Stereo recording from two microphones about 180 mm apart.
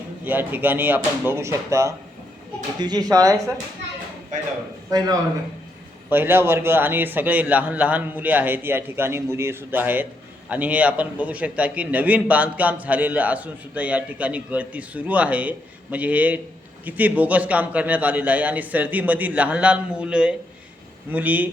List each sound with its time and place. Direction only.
0.3 s a man's voice: 10° right (ahead or behind)
4.9 s a man's voice: 20° right (ahead or behind)